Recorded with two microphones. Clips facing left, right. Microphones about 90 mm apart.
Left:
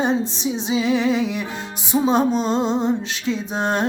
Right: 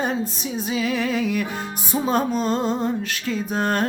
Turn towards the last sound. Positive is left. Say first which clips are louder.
# even
turn(degrees=20)  # may be behind; listen again after turning